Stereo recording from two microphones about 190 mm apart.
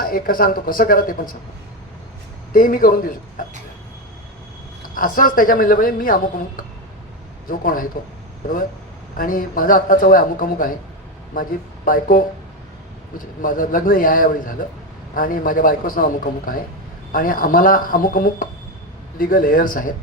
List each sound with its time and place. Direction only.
0.0 s speech: 50° left (ahead or behind)
2.5 s speech: 45° left (ahead or behind)
4.8 s speech: 45° left (ahead or behind)
7.4 s a man's voice: 45° left (ahead or behind)
9.1 s speech: 45° left (ahead or behind)
11.9 s speech: 45° left (ahead or behind)